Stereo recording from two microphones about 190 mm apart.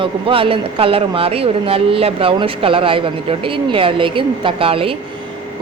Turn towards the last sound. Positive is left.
turn(degrees=-30)  # may be behind; listen again after turning